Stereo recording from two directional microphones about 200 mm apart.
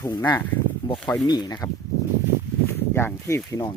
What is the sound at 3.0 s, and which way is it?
Speech, 10° left (ahead or behind).